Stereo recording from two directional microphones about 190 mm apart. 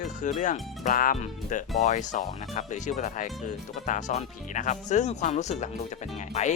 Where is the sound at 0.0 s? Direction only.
40° left (ahead or behind).